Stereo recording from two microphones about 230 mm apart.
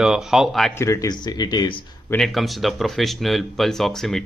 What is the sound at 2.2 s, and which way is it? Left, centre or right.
Speech, centre.